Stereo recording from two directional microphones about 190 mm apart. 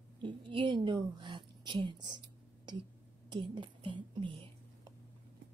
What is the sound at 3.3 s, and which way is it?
Speech, 25° right (ahead or behind).